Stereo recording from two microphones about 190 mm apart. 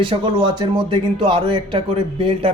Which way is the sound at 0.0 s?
25° right (ahead or behind).